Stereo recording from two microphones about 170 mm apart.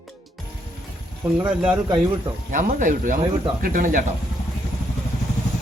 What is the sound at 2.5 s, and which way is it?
Speech, 50° right (ahead or behind).